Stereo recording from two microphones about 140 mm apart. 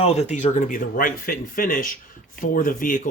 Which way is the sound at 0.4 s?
65° left (ahead or behind).